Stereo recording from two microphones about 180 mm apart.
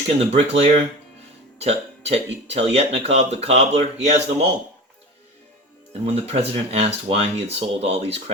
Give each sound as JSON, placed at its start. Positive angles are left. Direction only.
{"t": 0.2, "sound": "speech", "side_deg": -35}
{"t": 5.9, "sound": "speech", "side_deg": -35}